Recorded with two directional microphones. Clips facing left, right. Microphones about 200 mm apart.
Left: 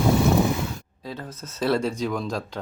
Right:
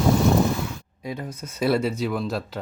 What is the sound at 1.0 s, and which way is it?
Speech, 10° right (ahead or behind).